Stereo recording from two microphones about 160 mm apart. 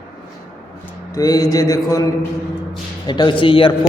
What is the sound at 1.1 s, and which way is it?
Speech, 20° left (ahead or behind).